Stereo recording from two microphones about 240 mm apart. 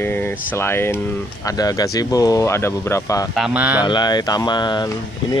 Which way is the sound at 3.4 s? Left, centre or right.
Centre.